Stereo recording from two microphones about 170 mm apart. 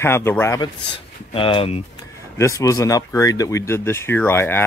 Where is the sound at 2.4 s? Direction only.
20° left (ahead or behind).